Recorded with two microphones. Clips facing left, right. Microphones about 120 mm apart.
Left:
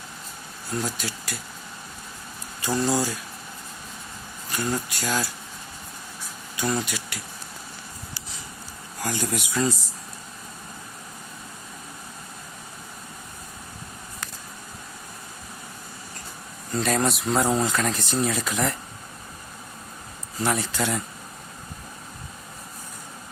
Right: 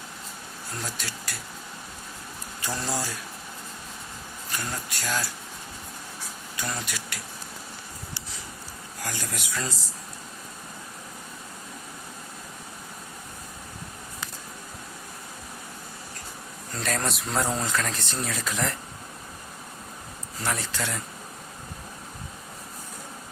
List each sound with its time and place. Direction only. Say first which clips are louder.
0.9 s speech: left 4 dB; 5° left (ahead or behind)
2.6 s speech: left 7 dB; centre (ahead or behind)
4.5 s speech: left 7 dB; 5° left (ahead or behind)
6.6 s speech: left 7 dB; 5° left (ahead or behind)
9.0 s speech: left 7 dB; 20° left (ahead or behind)
16.7 s speech: left 6 dB; 10° left (ahead or behind)
20.4 s speech: left 5 dB; 10° left (ahead or behind)